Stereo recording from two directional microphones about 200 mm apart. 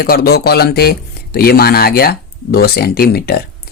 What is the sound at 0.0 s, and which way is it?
Speech, 50° left (ahead or behind).